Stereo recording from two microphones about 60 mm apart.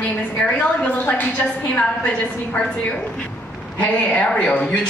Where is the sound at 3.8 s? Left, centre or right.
Left.